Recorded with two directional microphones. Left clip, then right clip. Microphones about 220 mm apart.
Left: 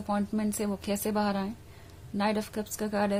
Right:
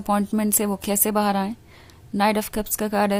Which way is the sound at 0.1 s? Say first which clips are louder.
Right 9 dB; 35° right (ahead or behind).